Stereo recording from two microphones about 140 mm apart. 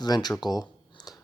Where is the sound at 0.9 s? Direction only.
30° left (ahead or behind).